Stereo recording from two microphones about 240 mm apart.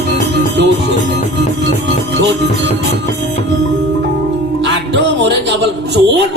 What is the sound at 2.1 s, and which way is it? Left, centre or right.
Speech, right.